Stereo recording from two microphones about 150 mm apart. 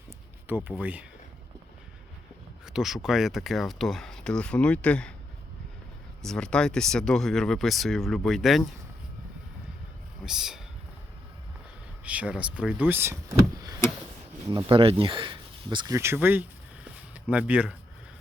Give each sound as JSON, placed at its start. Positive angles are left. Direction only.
{"t": 0.4, "sound": "speech", "side_deg": -15}
{"t": 2.6, "sound": "speech", "side_deg": -5}
{"t": 6.2, "sound": "speech", "side_deg": 5}
{"t": 10.2, "sound": "speech", "side_deg": -5}
{"t": 12.0, "sound": "speech", "side_deg": -10}
{"t": 14.5, "sound": "speech", "side_deg": -35}
{"t": 16.0, "sound": "speech", "side_deg": -15}